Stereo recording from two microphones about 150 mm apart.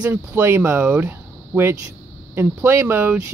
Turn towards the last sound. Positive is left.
turn(degrees=-15)  # may be behind; listen again after turning